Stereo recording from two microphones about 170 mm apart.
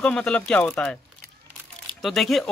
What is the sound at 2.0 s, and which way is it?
Speech, centre (ahead or behind).